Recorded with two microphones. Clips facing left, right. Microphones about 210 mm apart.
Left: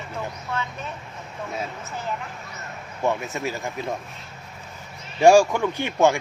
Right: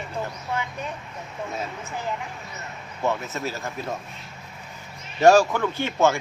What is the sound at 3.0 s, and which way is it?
Speech, 15° left (ahead or behind).